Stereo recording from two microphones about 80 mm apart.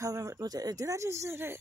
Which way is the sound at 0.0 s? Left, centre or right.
Right.